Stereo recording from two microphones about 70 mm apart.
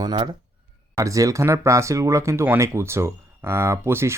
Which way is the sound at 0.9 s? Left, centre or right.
Right.